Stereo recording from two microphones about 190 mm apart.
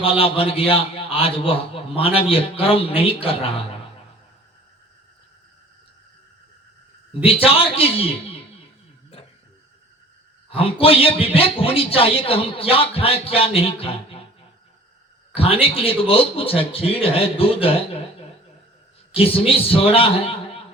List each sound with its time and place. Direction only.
0.0 s a man's voice: 30° left (ahead or behind)
7.1 s a man's voice: 30° left (ahead or behind)
10.5 s a man's voice: 30° left (ahead or behind)
15.4 s a man's voice: 30° left (ahead or behind)
19.1 s a man's voice: 30° left (ahead or behind)